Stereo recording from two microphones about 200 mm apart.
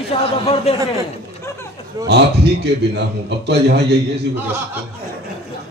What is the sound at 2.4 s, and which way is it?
A man's voice, 60° right (ahead or behind).